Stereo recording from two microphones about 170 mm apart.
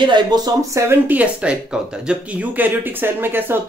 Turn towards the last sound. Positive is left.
turn(degrees=-10)  # may be behind; listen again after turning